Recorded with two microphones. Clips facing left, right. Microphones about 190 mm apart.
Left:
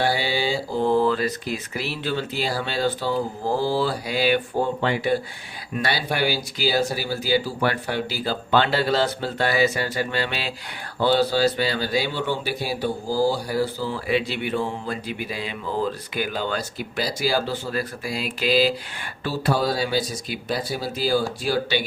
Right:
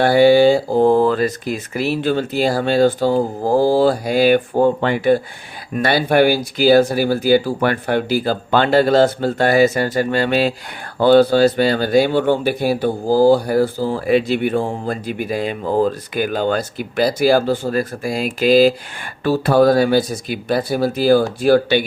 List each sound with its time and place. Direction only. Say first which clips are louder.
0.0 s speech: right 13 dB; 55° right (ahead or behind)